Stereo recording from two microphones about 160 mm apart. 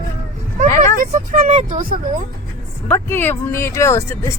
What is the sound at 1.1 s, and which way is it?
Speech, 50° right (ahead or behind).